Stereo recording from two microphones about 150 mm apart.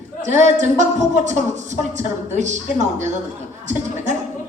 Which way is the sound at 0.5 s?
50° right (ahead or behind).